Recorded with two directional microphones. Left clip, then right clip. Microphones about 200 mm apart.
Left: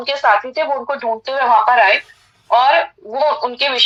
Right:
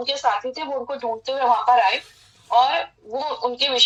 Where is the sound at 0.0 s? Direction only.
40° left (ahead or behind).